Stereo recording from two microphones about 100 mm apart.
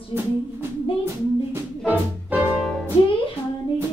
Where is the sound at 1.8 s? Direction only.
15° right (ahead or behind).